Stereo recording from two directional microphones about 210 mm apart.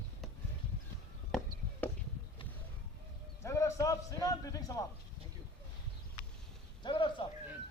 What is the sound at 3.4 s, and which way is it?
A man's voice, 15° left (ahead or behind).